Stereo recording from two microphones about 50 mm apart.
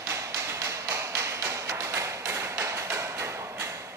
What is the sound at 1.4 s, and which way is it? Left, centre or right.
Music, right.